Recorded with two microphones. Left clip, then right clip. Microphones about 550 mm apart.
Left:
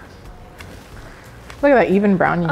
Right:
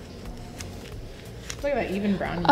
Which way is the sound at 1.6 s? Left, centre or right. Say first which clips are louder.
Left 14 dB; left.